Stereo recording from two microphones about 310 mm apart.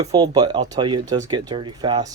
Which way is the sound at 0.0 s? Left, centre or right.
Centre.